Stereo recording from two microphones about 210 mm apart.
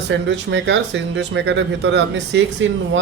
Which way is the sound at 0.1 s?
60° right (ahead or behind).